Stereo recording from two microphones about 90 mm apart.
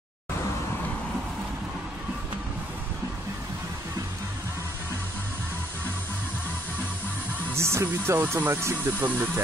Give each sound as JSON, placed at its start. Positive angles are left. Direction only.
{"t": 7.5, "sound": "speech", "side_deg": -30}